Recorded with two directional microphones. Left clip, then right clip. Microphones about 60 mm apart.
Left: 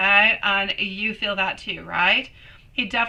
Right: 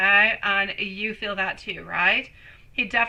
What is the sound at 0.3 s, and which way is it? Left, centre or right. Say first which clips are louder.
A woman's voice: left 2 dB; right.